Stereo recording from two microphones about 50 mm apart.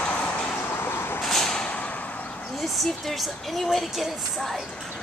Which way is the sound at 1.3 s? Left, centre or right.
Centre.